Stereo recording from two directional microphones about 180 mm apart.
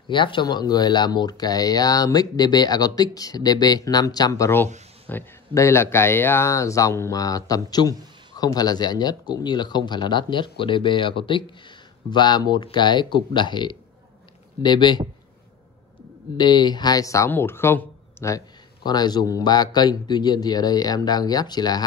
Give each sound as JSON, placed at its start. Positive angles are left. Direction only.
{"t": 0.1, "sound": "speech", "side_deg": 25}
{"t": 16.3, "sound": "speech", "side_deg": 25}